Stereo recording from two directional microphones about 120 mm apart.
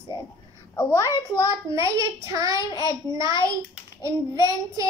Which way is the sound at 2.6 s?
35° left (ahead or behind).